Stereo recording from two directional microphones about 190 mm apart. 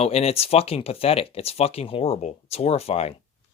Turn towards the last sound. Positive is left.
turn(degrees=35)  # may be behind; listen again after turning